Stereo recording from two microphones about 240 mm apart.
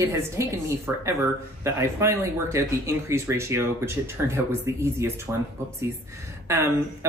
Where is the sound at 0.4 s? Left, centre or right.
Centre.